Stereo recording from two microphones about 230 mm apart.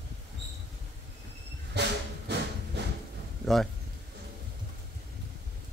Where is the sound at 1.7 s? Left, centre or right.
Right.